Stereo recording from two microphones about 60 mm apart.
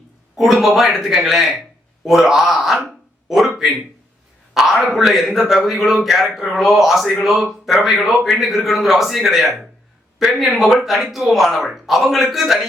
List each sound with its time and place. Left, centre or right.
0.3 s a man's voice: centre
4.5 s a man's voice: centre